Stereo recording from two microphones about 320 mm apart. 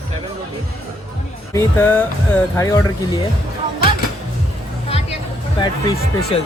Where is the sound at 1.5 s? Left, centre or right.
Centre.